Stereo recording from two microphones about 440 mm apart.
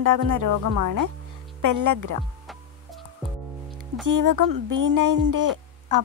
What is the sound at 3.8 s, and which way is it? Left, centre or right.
A woman's voice, right.